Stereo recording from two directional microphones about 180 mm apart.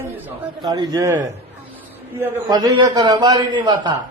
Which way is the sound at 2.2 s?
20° right (ahead or behind).